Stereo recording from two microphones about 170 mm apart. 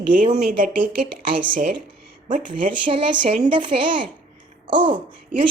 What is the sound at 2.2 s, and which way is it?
Speech, 50° right (ahead or behind).